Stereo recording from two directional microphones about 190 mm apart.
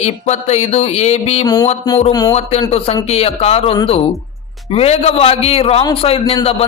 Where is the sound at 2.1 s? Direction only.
20° left (ahead or behind).